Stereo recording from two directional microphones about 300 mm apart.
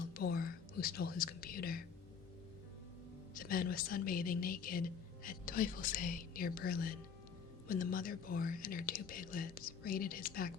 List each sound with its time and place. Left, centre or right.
0.1 s whispering: left
3.3 s a woman's voice: left